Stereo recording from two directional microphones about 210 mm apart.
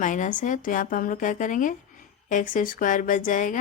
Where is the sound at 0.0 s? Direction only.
35° left (ahead or behind).